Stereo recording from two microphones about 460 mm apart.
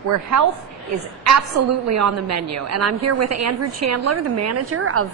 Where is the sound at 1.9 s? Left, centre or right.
Right.